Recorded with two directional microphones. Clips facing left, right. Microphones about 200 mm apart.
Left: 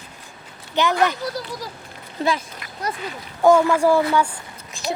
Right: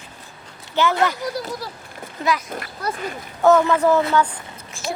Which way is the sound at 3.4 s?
10° left (ahead or behind).